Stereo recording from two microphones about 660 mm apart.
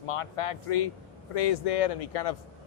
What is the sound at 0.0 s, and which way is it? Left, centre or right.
Speech, left.